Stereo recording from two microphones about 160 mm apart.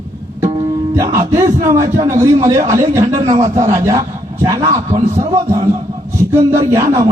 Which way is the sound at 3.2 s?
40° right (ahead or behind).